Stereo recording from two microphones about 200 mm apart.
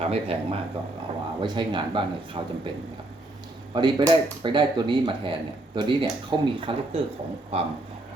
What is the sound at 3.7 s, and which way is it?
A man's voice, 20° right (ahead or behind).